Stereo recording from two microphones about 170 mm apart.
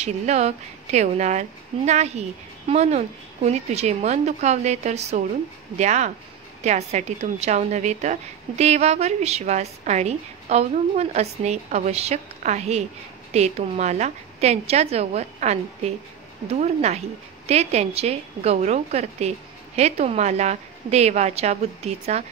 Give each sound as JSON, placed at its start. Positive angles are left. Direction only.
{"t": 0.0, "sound": "a woman's voice", "side_deg": -40}